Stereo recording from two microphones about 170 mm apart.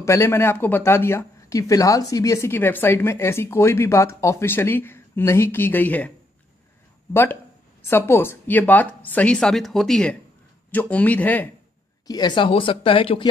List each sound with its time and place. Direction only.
0.0 s speech: 15° left (ahead or behind)
7.9 s speech: 15° left (ahead or behind)
12.1 s speech: 25° left (ahead or behind)